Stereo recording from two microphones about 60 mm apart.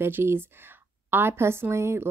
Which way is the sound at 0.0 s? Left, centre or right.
Right.